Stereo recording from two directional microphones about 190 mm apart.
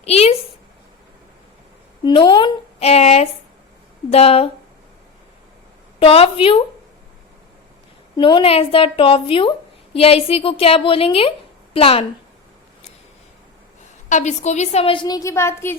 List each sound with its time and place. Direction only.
0.0 s a woman's voice: 30° left (ahead or behind)
2.0 s a woman's voice: 25° left (ahead or behind)
2.7 s a sound: 35° left (ahead or behind)
4.1 s a woman's voice: 30° left (ahead or behind)
6.0 s a woman's voice: 30° left (ahead or behind)
8.1 s a woman's voice: 25° left (ahead or behind)
14.1 s a woman's voice: 40° left (ahead or behind); by 15.7 s 15° left (ahead or behind)